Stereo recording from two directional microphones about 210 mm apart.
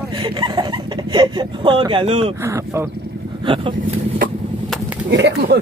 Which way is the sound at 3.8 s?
40° right (ahead or behind).